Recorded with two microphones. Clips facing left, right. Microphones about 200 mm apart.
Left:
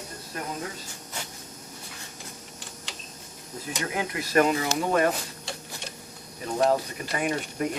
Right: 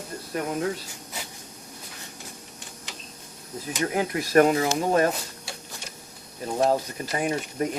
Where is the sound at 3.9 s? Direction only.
45° right (ahead or behind).